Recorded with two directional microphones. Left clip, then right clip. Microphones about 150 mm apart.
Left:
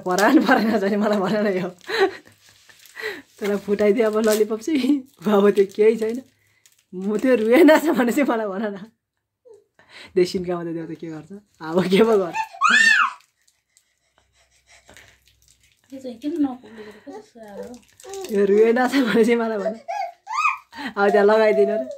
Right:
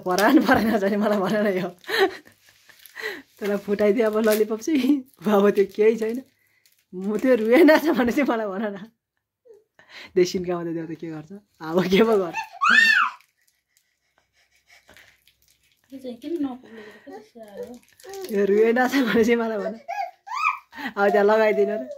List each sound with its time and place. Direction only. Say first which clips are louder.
0.0 s a woman's voice: left 1 dB; 15° right (ahead or behind)
12.3 s speech: left 2 dB; centre (ahead or behind)
16.6 s speech: left 3 dB; 10° right (ahead or behind)
17.4 s a woman's voice: left 2 dB; 30° right (ahead or behind)
18.0 s speech: left 3 dB; 10° right (ahead or behind)
20.8 s speech: left 2 dB; 10° right (ahead or behind)